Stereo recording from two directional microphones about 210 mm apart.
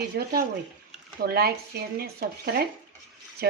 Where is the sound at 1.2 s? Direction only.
45° right (ahead or behind).